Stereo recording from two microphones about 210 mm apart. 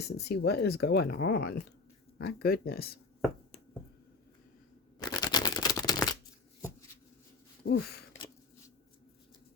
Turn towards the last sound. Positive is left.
turn(degrees=45)  # may be behind; listen again after turning